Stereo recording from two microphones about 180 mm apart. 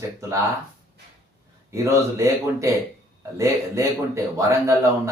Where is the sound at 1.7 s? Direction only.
15° right (ahead or behind).